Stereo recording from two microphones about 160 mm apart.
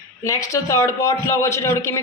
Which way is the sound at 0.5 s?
20° left (ahead or behind).